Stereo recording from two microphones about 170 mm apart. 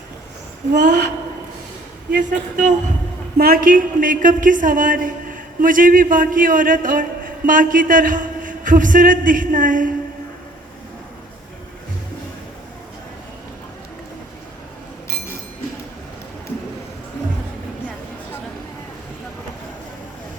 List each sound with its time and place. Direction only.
0.7 s a woman's voice: 45° right (ahead or behind)
2.1 s a woman's voice: 45° right (ahead or behind)
3.3 s a woman's voice: 60° right (ahead or behind)